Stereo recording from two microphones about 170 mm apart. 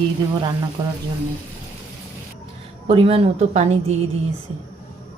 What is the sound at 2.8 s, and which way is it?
Speech, 35° right (ahead or behind).